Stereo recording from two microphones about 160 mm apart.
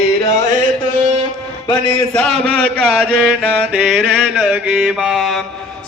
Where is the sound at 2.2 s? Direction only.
40° right (ahead or behind).